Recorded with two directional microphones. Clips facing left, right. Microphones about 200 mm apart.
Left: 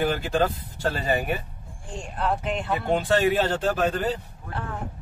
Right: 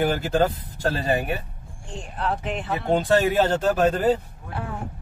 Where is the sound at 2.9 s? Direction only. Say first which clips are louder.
Right 2 dB; 45° right (ahead or behind).